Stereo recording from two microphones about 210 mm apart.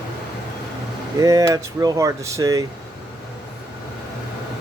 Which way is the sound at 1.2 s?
15° right (ahead or behind).